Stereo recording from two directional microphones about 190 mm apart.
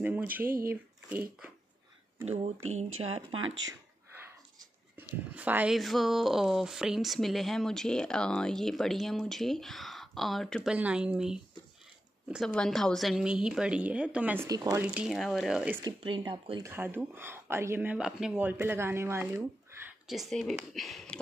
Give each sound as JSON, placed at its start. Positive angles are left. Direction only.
{"t": 0.0, "sound": "speech", "side_deg": -10}
{"t": 2.2, "sound": "speech", "side_deg": -35}
{"t": 3.4, "sound": "speech", "side_deg": -80}
{"t": 4.1, "sound": "speech", "side_deg": -10}
{"t": 14.8, "sound": "speech", "side_deg": -5}
{"t": 15.8, "sound": "speech", "side_deg": -25}
{"t": 16.6, "sound": "speech", "side_deg": -10}